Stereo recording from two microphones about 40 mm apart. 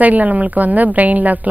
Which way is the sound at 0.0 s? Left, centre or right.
Right.